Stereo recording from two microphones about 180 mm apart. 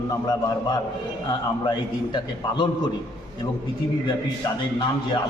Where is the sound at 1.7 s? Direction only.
25° left (ahead or behind).